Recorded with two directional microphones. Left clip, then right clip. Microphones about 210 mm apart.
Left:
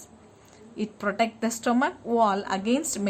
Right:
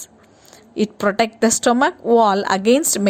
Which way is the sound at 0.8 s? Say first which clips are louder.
Right 8 dB; 35° right (ahead or behind).